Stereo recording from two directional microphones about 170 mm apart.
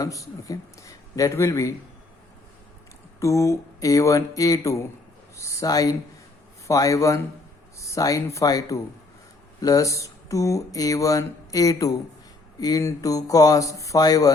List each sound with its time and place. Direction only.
0.0 s speech: 20° left (ahead or behind)
3.2 s speech: 20° left (ahead or behind)